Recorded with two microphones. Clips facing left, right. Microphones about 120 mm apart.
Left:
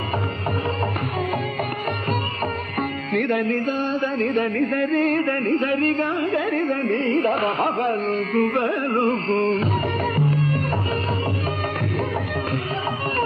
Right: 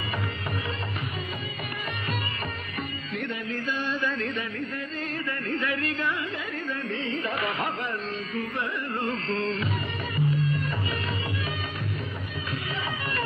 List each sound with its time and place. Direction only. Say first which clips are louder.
3.1 s music: left 13 dB; 65° left (ahead or behind)
7.3 s music: left 8 dB; 40° left (ahead or behind); by 9.0 s 55° left (ahead or behind)
9.0 s music: left 7 dB; 40° left (ahead or behind)
10.1 s music: left 5 dB; 60° left (ahead or behind)